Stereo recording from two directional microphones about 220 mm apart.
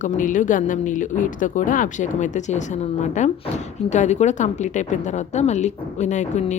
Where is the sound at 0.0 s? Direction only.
35° left (ahead or behind).